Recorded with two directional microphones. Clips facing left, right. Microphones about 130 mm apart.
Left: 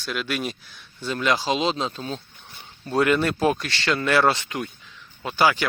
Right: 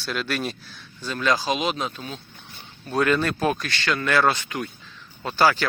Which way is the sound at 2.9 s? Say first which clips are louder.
Left 1 dB; 20° left (ahead or behind).